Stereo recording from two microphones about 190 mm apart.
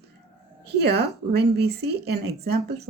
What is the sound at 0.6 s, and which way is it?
A woman's voice, 60° right (ahead or behind).